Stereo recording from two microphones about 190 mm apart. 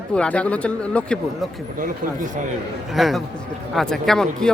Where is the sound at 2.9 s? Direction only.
Centre (ahead or behind).